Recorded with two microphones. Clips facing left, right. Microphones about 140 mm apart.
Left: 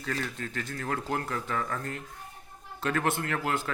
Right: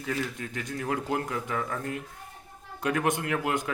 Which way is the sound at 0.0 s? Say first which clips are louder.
Right 2 dB; 15° right (ahead or behind).